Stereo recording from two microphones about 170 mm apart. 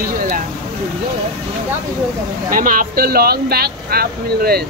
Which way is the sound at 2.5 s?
55° right (ahead or behind).